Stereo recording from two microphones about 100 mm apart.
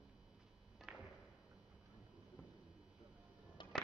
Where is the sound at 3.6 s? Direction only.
50° left (ahead or behind).